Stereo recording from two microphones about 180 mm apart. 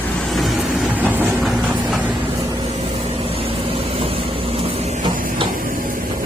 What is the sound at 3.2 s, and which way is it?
Vehicle, 30° right (ahead or behind).